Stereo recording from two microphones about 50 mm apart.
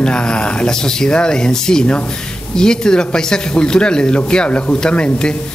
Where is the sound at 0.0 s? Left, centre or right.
Centre.